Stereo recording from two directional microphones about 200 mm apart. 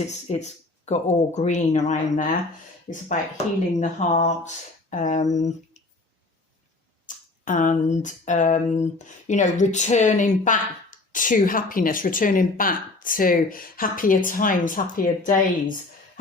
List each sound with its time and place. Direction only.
0.1 s speech: 35° left (ahead or behind)
7.4 s speech: 40° left (ahead or behind)